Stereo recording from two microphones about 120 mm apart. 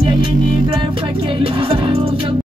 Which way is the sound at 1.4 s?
45° right (ahead or behind).